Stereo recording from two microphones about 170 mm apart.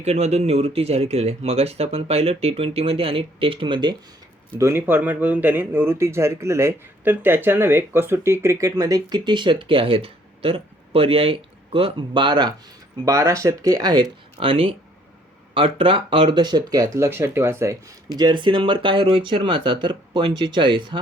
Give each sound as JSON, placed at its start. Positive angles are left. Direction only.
{"t": 0.0, "sound": "speech", "side_deg": -40}
{"t": 4.5, "sound": "speech", "side_deg": -15}